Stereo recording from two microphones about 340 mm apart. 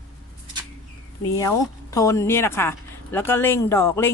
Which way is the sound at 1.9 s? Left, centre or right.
Centre.